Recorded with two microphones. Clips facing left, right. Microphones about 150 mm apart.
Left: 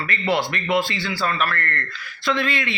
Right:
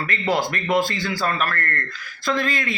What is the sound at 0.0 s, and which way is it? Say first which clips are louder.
Speech: even; 40° right (ahead or behind).